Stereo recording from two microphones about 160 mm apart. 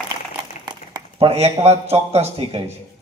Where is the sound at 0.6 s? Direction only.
30° right (ahead or behind).